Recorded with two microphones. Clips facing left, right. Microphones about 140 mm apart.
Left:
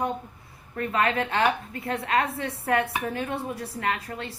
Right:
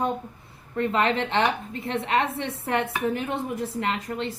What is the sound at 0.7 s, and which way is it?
A woman's voice, 25° right (ahead or behind).